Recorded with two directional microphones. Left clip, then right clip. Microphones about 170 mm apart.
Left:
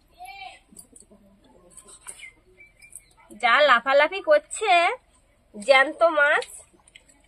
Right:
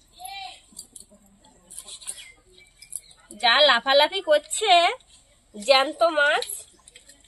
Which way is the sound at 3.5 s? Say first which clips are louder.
Even; 5° left (ahead or behind).